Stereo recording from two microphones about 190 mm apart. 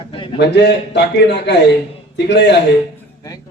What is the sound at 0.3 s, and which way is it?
Speech, 65° left (ahead or behind).